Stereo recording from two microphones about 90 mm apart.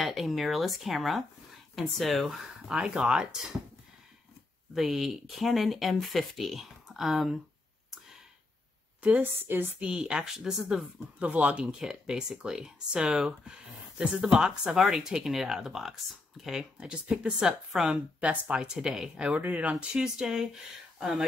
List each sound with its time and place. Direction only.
0.0 s speech: centre (ahead or behind)
4.7 s speech: 5° right (ahead or behind)
9.0 s a woman's voice: 20° right (ahead or behind)
9.8 s speech: 10° right (ahead or behind)